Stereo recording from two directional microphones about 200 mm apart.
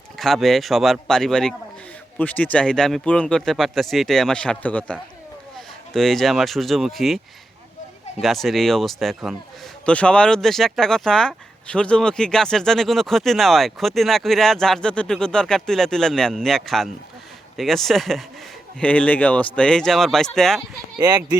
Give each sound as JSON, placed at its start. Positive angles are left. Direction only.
{"t": 0.2, "sound": "speech", "side_deg": 0}
{"t": 8.2, "sound": "speech", "side_deg": 0}
{"t": 21.0, "sound": "speech", "side_deg": -20}